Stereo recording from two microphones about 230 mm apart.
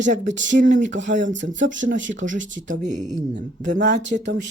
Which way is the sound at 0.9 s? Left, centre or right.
Right.